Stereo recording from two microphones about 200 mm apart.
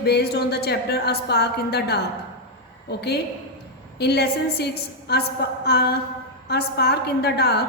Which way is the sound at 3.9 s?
55° left (ahead or behind).